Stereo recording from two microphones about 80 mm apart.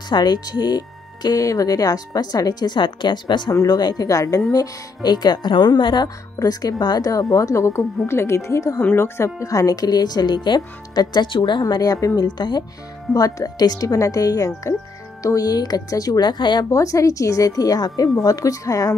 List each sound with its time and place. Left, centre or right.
0.1 s speech: left
3.5 s speech: left
6.0 s speech: left
13.1 s speech: left
15.2 s speech: left
16.7 s speech: left